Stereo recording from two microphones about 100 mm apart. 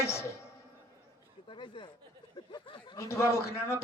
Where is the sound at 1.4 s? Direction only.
55° left (ahead or behind).